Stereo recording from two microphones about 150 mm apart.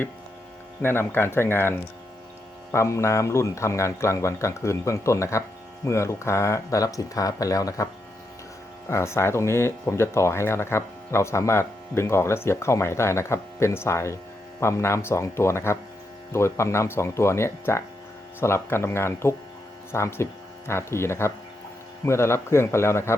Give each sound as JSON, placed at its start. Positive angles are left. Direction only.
{"t": 0.8, "sound": "speech", "side_deg": 15}
{"t": 8.9, "sound": "speech", "side_deg": 20}